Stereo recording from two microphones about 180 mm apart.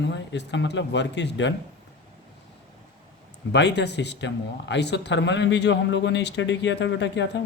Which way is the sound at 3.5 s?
70° left (ahead or behind).